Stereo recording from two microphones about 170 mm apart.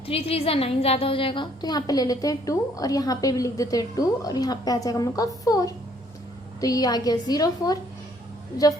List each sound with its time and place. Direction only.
0.1 s a woman's voice: 35° left (ahead or behind)